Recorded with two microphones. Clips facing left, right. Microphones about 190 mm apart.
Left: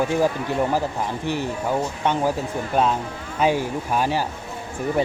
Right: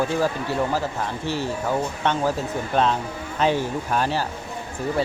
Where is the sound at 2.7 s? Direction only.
10° left (ahead or behind).